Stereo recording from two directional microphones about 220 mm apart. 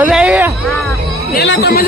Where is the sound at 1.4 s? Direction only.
55° left (ahead or behind).